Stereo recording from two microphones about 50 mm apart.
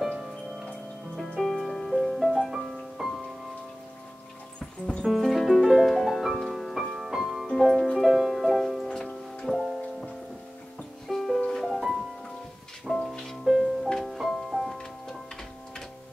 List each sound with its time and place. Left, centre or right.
0.0 s music: centre
1.1 s music: centre
2.5 s music: centre
5.0 s music: centre
13.8 s music: centre
14.1 s music: centre